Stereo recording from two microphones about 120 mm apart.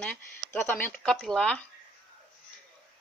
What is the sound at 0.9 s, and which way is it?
Speech, 5° left (ahead or behind).